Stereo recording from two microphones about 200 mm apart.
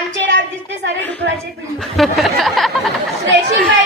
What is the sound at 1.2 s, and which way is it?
Speech, 55° right (ahead or behind).